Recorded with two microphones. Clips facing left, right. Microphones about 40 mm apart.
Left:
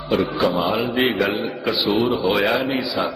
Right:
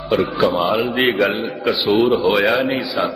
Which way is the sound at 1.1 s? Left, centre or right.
Right.